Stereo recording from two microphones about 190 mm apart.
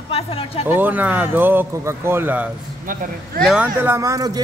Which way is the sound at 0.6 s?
10° right (ahead or behind).